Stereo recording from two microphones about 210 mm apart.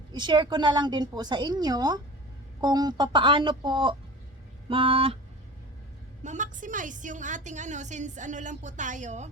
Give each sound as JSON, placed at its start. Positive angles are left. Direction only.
{"t": 0.1, "sound": "a woman's voice", "side_deg": -20}
{"t": 6.2, "sound": "a woman's voice", "side_deg": -35}